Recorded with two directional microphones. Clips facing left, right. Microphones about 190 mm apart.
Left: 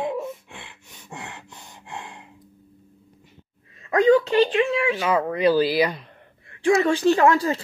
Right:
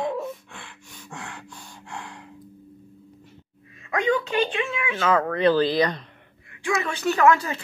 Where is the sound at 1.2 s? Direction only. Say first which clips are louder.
Even; 20° left (ahead or behind).